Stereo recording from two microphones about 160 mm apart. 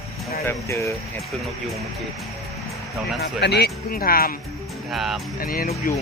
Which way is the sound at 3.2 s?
90° left.